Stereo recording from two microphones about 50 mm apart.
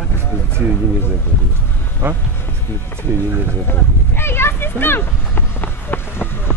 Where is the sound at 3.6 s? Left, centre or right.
Left.